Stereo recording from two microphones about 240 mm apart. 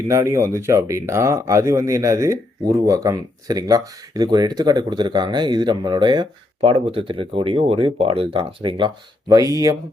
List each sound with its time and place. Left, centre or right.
0.1 s speech: centre